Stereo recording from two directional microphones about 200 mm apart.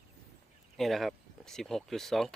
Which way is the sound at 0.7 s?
Centre (ahead or behind).